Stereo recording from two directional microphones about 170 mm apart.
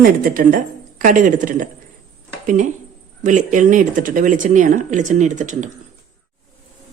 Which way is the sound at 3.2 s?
45° right (ahead or behind).